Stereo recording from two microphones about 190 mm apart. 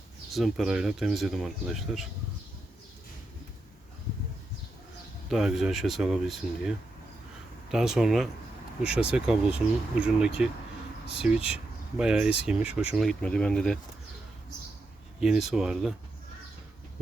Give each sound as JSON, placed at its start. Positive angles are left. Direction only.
{"t": 0.3, "sound": "speech", "side_deg": 0}
{"t": 5.3, "sound": "speech", "side_deg": 0}
{"t": 8.8, "sound": "speech", "side_deg": 30}
{"t": 9.1, "sound": "speech", "side_deg": -5}
{"t": 15.2, "sound": "speech", "side_deg": 0}